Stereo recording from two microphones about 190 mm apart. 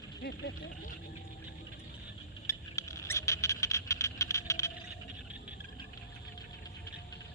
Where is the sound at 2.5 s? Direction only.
15° left (ahead or behind).